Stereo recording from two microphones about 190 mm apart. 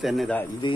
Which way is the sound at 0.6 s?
25° left (ahead or behind).